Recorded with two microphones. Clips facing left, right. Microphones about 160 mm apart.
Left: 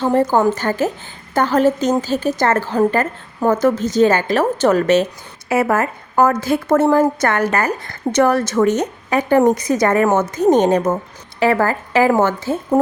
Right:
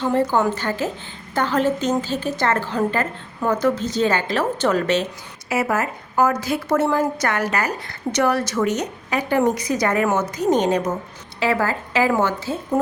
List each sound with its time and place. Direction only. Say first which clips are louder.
0.0 s a woman's voice: left 4 dB; 45° left (ahead or behind)